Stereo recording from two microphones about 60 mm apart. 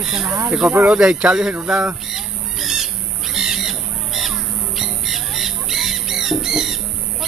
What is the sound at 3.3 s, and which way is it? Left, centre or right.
Crow, centre.